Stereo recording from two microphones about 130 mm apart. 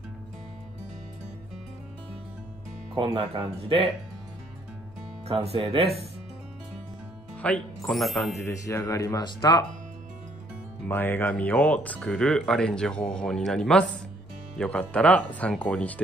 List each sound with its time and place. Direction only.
3.2 s speech: 45° right (ahead or behind)
5.3 s speech: 50° right (ahead or behind)
7.3 s speech: 10° left (ahead or behind)
7.9 s speech: centre (ahead or behind)
8.4 s speech: 20° left (ahead or behind)
10.9 s speech: 15° left (ahead or behind)